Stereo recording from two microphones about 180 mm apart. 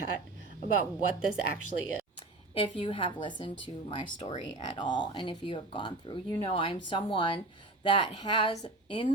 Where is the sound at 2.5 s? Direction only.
30° left (ahead or behind).